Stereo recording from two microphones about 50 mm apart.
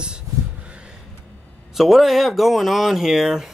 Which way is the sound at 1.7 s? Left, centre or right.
Centre.